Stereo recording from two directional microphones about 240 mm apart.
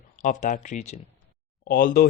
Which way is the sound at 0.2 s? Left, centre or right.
Left.